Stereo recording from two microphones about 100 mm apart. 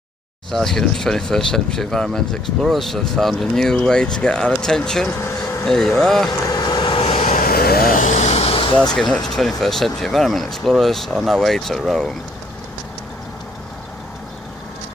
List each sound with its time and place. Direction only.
0.5 s speech: 5° left (ahead or behind)
6.5 s vehicle: 45° left (ahead or behind)
7.0 s vehicle: 90° left; by 8.8 s 60° left (ahead or behind)
8.9 s speech: 5° left (ahead or behind)